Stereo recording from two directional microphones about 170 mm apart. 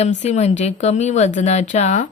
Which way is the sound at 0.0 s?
40° left (ahead or behind).